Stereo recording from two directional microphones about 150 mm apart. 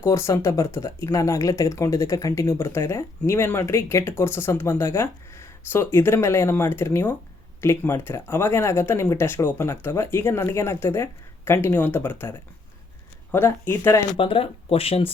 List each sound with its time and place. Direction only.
0.0 s speech: 20° left (ahead or behind)
13.3 s speech: 15° left (ahead or behind)
14.2 s speech: 40° left (ahead or behind)